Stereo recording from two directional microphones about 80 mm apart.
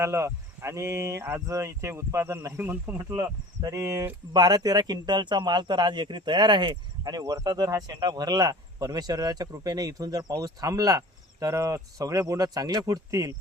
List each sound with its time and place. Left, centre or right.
0.0 s speech: right
2.6 s speech: right
3.0 s speech: right
4.3 s speech: right